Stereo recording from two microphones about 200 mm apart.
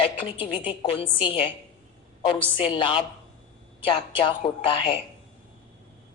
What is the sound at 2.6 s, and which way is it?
A woman's voice, 25° left (ahead or behind).